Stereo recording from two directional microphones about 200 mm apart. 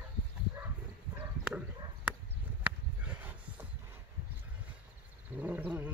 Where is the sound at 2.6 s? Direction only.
10° right (ahead or behind).